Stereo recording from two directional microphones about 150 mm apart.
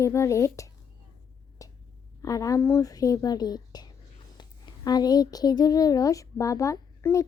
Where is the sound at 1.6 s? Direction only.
20° left (ahead or behind).